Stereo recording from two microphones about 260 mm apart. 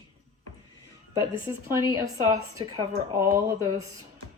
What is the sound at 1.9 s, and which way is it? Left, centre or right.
Speech, centre.